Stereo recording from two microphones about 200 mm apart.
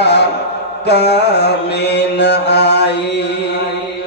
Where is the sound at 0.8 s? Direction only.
55° left (ahead or behind).